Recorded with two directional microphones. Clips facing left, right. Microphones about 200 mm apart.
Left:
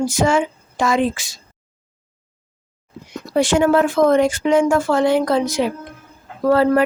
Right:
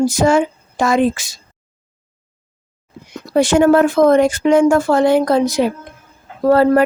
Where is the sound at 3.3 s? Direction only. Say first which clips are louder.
Right 4 dB; 45° right (ahead or behind).